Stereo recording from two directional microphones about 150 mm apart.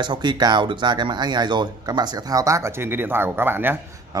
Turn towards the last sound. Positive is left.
turn(degrees=-25)  # may be behind; listen again after turning